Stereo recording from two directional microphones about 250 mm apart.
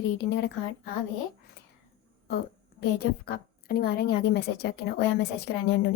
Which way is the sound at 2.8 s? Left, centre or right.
Left.